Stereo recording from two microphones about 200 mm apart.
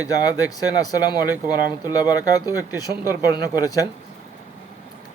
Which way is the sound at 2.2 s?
15° left (ahead or behind).